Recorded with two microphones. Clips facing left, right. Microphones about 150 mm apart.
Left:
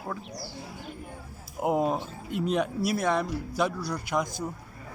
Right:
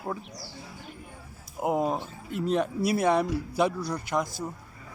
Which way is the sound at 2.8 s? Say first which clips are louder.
Right 6 dB; 5° right (ahead or behind).